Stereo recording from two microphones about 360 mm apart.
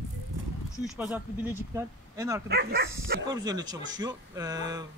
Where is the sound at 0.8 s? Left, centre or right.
Centre.